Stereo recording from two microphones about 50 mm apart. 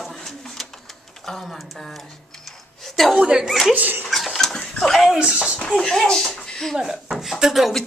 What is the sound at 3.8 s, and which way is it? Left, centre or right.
Dog, right.